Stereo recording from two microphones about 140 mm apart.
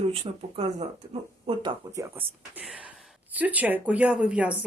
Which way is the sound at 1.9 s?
25° right (ahead or behind).